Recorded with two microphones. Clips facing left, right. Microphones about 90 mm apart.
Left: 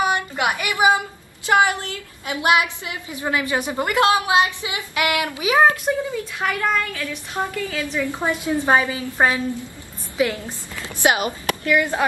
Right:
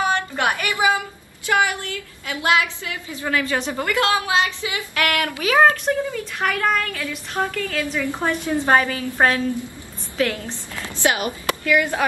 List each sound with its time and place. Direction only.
0.0 s a woman's voice: 15° left (ahead or behind)
6.4 s a woman's voice: centre (ahead or behind)
7.3 s a woman's voice: 15° left (ahead or behind)